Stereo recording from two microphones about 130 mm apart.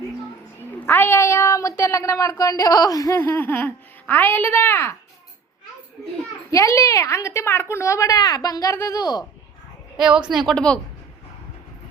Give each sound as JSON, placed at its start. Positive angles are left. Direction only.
{"t": 0.9, "sound": "a woman's voice", "side_deg": 15}
{"t": 6.5, "sound": "a woman's voice", "side_deg": 25}
{"t": 10.0, "sound": "speech", "side_deg": -5}